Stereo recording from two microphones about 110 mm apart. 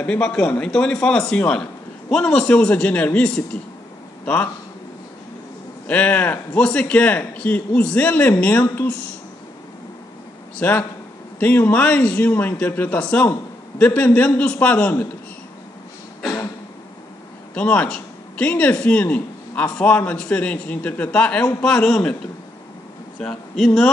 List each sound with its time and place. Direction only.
0.0 s a man's voice: 10° left (ahead or behind)
5.9 s speech: 15° left (ahead or behind)
10.6 s speech: 20° left (ahead or behind)
17.6 s speech: 10° left (ahead or behind)
23.2 s speech: 5° left (ahead or behind)